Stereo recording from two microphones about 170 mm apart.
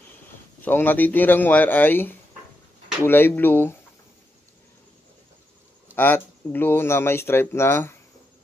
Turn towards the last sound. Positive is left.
turn(degrees=15)  # may be behind; listen again after turning